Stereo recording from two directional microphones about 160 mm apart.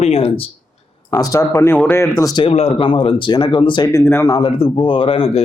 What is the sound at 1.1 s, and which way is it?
Speech, 20° left (ahead or behind).